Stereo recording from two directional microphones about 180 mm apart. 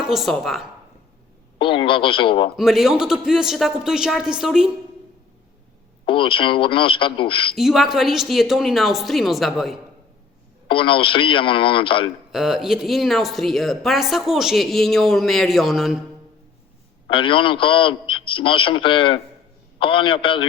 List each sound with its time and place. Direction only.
0.0 s speech: centre (ahead or behind)
1.5 s a man's voice: 30° left (ahead or behind)
2.6 s speech: centre (ahead or behind)
6.1 s a man's voice: 30° left (ahead or behind)
7.5 s speech: centre (ahead or behind)
10.7 s a man's voice: 30° left (ahead or behind)
12.3 s speech: centre (ahead or behind)
17.1 s a man's voice: 30° left (ahead or behind)